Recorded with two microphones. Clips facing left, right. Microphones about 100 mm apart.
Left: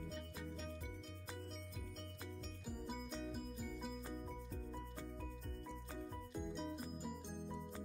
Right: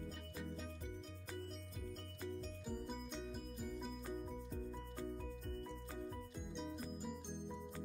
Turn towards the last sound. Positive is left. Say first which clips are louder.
# right 1 dB
turn(degrees=0)  # may be behind; listen again after turning